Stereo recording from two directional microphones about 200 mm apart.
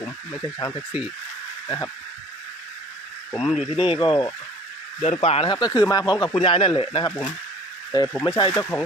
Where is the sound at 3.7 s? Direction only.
25° left (ahead or behind).